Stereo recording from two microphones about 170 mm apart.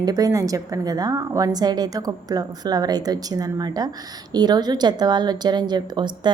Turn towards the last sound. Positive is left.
turn(degrees=-25)  # may be behind; listen again after turning